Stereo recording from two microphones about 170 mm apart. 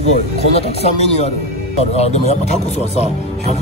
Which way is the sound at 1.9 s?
40° left (ahead or behind).